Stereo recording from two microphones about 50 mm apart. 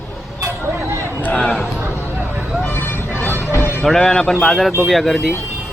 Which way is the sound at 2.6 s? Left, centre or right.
Left.